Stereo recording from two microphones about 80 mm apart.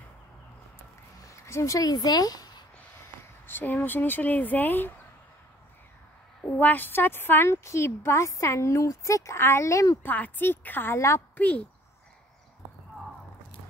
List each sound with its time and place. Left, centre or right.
1.2 s a sound: left
1.8 s speech: left
3.4 s speech: left
6.6 s a woman's voice: left
10.0 s speech: left
11.3 s speech: centre